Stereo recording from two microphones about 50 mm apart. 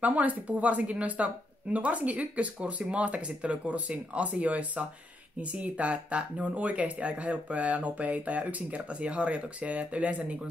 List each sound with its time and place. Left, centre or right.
0.0 s speech: right